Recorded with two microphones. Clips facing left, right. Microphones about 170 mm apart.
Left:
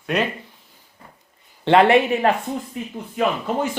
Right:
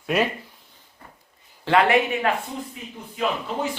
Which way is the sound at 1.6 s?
25° left (ahead or behind).